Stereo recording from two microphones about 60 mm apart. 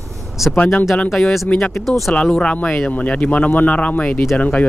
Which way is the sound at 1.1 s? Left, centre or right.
Centre.